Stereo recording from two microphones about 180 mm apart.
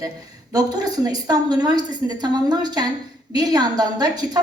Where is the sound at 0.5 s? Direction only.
20° right (ahead or behind).